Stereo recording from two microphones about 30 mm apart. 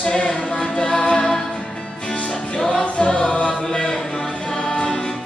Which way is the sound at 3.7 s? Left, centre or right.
Left.